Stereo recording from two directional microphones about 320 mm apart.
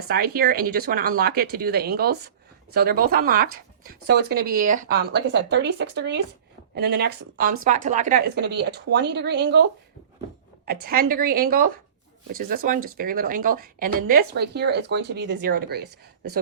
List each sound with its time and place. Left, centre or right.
0.1 s speech: right
10.7 s speech: right